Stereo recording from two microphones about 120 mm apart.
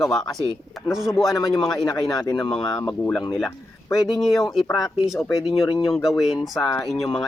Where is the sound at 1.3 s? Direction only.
35° left (ahead or behind).